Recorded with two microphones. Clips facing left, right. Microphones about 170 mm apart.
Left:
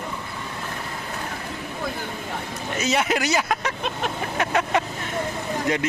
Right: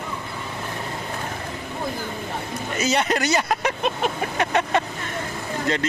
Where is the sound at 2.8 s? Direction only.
Centre (ahead or behind).